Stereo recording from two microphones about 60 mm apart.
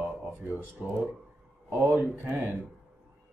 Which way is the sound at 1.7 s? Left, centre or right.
Right.